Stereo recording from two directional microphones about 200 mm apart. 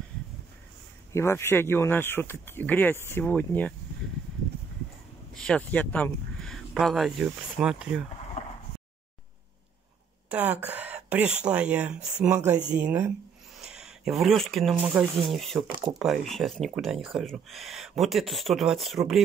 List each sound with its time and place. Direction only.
1.1 s speech: 10° left (ahead or behind)
5.3 s speech: 5° left (ahead or behind)
8.4 s a sound: 35° left (ahead or behind)
10.3 s speech: 5° right (ahead or behind)